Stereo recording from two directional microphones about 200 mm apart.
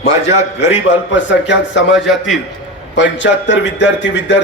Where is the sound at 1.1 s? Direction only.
65° left (ahead or behind).